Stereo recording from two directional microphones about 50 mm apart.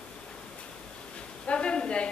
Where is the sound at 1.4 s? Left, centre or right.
Left.